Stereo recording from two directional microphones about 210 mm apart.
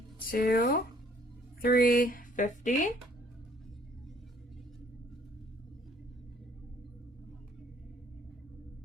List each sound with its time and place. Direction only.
0.3 s speech: 45° left (ahead or behind)